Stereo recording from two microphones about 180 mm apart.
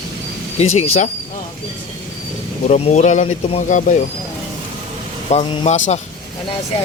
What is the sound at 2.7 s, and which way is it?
Speech, 40° left (ahead or behind).